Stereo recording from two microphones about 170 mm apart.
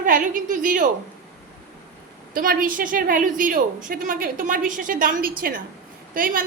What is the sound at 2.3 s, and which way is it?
A woman's voice, 55° right (ahead or behind).